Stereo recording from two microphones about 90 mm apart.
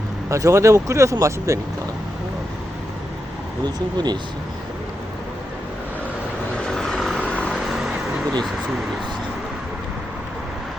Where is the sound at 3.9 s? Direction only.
55° right (ahead or behind).